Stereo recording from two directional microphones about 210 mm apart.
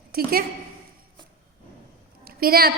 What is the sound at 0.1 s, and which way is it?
Speech, 45° right (ahead or behind).